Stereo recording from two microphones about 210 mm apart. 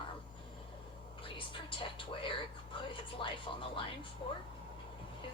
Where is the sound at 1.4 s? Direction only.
25° left (ahead or behind).